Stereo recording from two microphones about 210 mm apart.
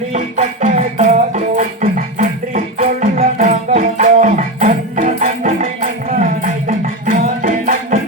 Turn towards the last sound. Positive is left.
turn(degrees=-40)  # may be behind; listen again after turning